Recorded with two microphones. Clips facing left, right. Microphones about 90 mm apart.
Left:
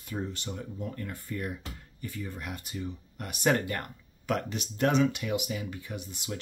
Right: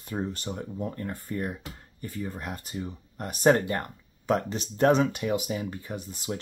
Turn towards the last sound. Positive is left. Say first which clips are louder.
# right 4 dB
turn(degrees=-40)  # may be behind; listen again after turning